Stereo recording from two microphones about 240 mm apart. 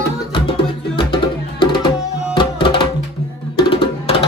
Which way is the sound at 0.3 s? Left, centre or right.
Left.